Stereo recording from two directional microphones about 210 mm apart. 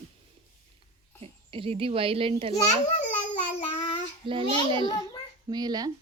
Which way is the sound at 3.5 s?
25° left (ahead or behind).